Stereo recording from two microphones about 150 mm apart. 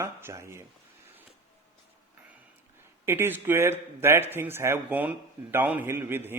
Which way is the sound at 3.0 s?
15° right (ahead or behind).